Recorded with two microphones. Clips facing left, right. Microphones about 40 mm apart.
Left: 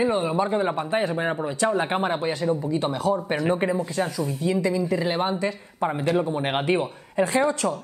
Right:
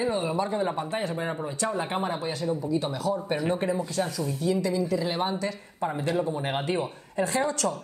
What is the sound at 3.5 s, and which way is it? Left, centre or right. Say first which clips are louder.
Speech: left 5 dB; left.